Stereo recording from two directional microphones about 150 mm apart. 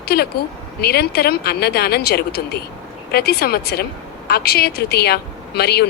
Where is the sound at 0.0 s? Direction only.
90° left.